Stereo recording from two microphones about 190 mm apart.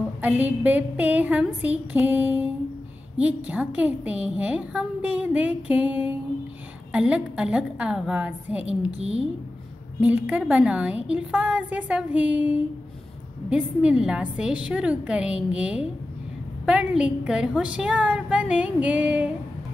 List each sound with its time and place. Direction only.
0.2 s a woman's voice: 10° right (ahead or behind)
8.9 s a woman's voice: 30° right (ahead or behind)
9.9 s a woman's voice: 10° right (ahead or behind)